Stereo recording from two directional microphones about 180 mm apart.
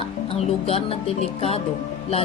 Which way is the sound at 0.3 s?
30° left (ahead or behind).